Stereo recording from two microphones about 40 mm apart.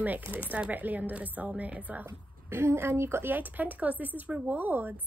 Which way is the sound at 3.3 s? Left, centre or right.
Right.